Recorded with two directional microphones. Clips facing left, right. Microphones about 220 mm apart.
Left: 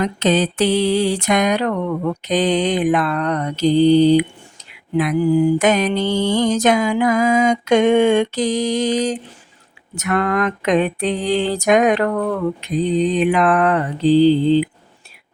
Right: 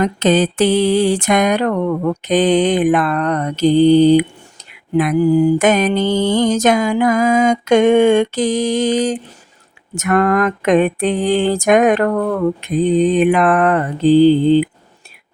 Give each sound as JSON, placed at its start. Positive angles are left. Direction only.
{"t": 0.0, "sound": "mantra", "side_deg": -50}